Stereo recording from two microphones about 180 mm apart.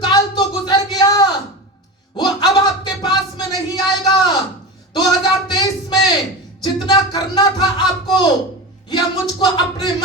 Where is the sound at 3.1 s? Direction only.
25° left (ahead or behind).